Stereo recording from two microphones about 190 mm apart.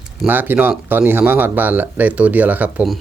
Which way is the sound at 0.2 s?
10° right (ahead or behind).